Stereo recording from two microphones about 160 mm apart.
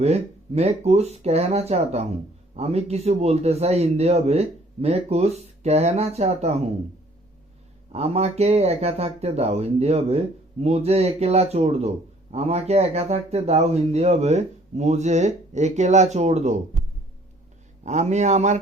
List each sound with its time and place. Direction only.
0.0 s speech: 40° right (ahead or behind)
7.9 s speech: 40° right (ahead or behind)
17.8 s speech: 45° right (ahead or behind)